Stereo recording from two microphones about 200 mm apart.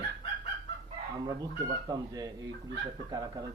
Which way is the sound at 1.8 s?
20° right (ahead or behind).